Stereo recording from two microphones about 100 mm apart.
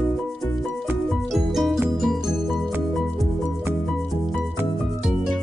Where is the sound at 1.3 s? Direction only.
Centre (ahead or behind).